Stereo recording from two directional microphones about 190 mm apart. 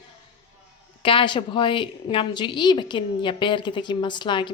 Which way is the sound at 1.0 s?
25° left (ahead or behind).